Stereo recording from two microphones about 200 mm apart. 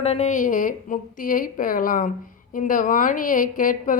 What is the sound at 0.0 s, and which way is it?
A woman's voice, 30° left (ahead or behind).